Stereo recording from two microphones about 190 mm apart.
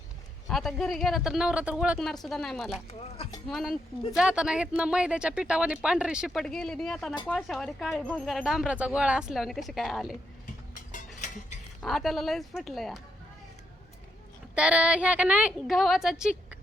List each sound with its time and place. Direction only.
0.4 s speech: centre (ahead or behind)
10.4 s mechanisms: 40° left (ahead or behind)
11.8 s speech: centre (ahead or behind)
14.5 s speech: 5° right (ahead or behind)